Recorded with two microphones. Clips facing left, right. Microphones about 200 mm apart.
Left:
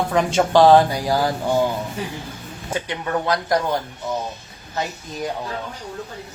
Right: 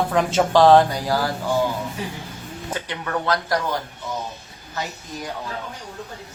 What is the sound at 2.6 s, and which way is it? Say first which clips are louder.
Speech: left 4 dB; 15° left (ahead or behind).